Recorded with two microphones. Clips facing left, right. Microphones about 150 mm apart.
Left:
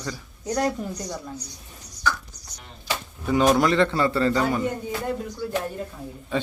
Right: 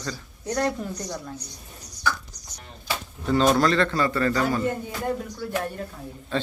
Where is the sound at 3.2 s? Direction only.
10° left (ahead or behind).